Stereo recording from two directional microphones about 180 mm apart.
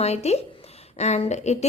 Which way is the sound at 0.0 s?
35° left (ahead or behind).